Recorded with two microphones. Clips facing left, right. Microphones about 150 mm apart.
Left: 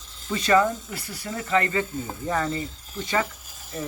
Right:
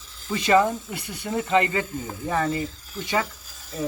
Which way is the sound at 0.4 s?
15° right (ahead or behind).